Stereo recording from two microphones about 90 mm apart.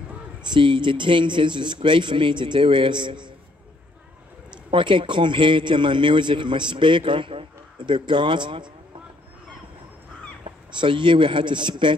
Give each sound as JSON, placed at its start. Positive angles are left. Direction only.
{"t": 0.4, "sound": "a man's voice", "side_deg": -60}
{"t": 4.6, "sound": "a man's voice", "side_deg": -70}
{"t": 10.8, "sound": "a man's voice", "side_deg": -65}